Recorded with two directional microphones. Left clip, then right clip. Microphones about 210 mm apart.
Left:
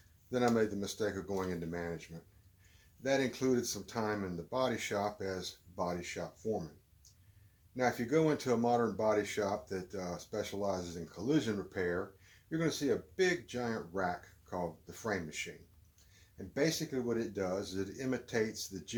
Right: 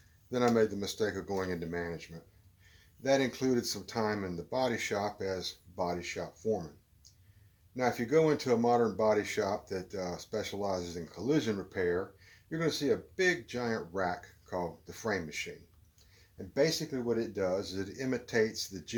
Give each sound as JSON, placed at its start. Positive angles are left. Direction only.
{"t": 0.3, "sound": "speech", "side_deg": -20}
{"t": 7.8, "sound": "speech", "side_deg": -20}
{"t": 13.1, "sound": "speech", "side_deg": -20}
{"t": 16.6, "sound": "speech", "side_deg": -20}